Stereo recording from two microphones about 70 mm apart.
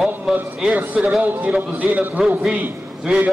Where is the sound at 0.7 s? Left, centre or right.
Right.